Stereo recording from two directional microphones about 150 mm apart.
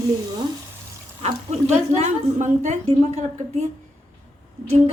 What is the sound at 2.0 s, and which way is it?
A woman's voice, 50° right (ahead or behind).